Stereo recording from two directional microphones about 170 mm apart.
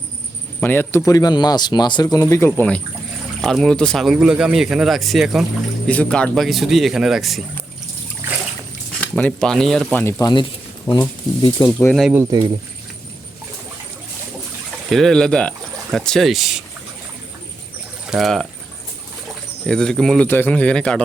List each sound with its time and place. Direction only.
0.6 s speech: 10° left (ahead or behind)
8.2 s splash: 15° right (ahead or behind)
9.0 s speech: 10° left (ahead or behind)
11.4 s speech: 20° left (ahead or behind)
11.9 s speech: centre (ahead or behind)
14.8 s speech: centre (ahead or behind)
18.0 s speech: centre (ahead or behind)
19.6 s speech: 5° left (ahead or behind)